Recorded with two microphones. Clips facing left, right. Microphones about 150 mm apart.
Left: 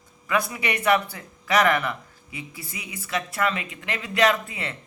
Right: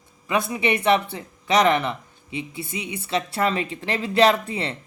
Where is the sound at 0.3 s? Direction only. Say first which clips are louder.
Right 3 dB; 25° right (ahead or behind).